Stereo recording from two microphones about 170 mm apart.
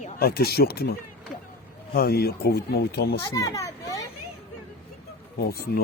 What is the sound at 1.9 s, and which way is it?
Speech, 65° left (ahead or behind).